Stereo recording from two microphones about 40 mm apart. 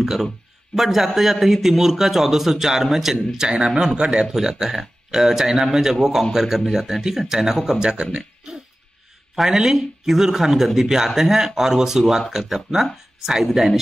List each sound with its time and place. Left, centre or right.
0.0 s a man's voice: centre
9.3 s a man's voice: centre
12.0 s speech: centre
12.3 s a man's voice: centre